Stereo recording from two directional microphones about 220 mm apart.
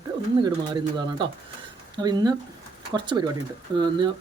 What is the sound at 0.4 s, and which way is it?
Speech, 20° right (ahead or behind).